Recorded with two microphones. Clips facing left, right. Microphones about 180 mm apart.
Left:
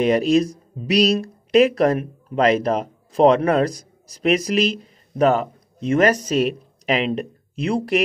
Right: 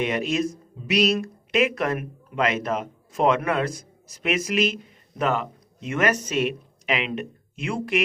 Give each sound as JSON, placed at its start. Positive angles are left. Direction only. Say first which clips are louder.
{"t": 0.0, "sound": "speech", "louder": "left 7 dB", "side_deg": 35}